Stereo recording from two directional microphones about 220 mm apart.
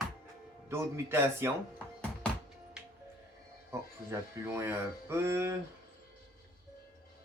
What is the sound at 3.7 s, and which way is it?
Speech, 15° right (ahead or behind).